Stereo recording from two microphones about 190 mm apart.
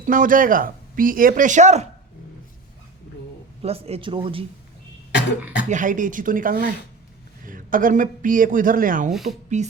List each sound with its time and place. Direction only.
0.0 s speech: 45° right (ahead or behind)
3.6 s a man's voice: 30° right (ahead or behind)
5.6 s speech: 40° right (ahead or behind)
9.5 s music: 40° right (ahead or behind)